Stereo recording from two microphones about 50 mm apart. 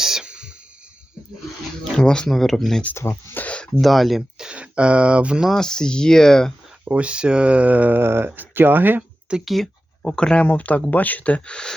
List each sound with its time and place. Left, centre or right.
0.0 s a sound: centre
1.8 s speech: centre
2.3 s speech: centre
2.9 s speech: left
3.3 s a sound: left
3.8 s speech: centre
4.4 s throat clearing: right
5.5 s speech: centre
6.8 s speech: right
7.9 s speech: right
9.5 s speech: centre
10.4 s speech: left